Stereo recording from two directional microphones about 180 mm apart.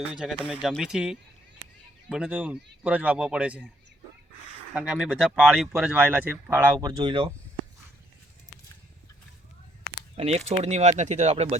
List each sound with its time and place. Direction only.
0.0 s a man's voice: 5° right (ahead or behind)
4.7 s speech: 5° right (ahead or behind)
6.8 s speech: 25° right (ahead or behind)
10.2 s speech: 35° right (ahead or behind)